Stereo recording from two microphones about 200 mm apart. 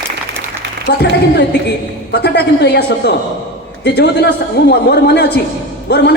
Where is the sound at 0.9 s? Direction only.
55° left (ahead or behind).